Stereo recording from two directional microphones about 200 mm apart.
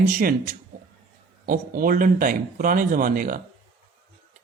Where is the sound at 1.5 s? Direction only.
45° right (ahead or behind).